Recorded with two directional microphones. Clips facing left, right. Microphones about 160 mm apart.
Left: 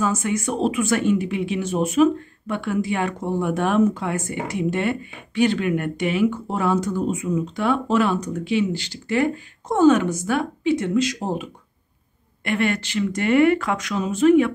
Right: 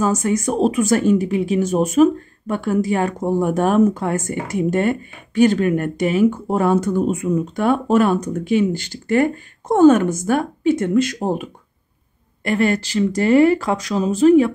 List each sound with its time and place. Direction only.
0.0 s speech: 40° right (ahead or behind)
12.4 s speech: 35° right (ahead or behind)